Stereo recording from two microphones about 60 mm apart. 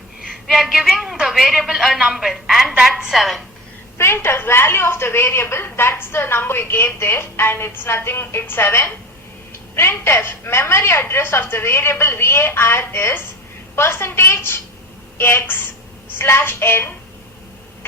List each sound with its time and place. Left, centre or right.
0.4 s a woman's voice: centre
3.9 s a woman's voice: left